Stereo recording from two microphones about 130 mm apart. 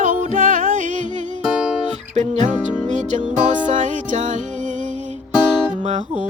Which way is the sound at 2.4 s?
10° right (ahead or behind).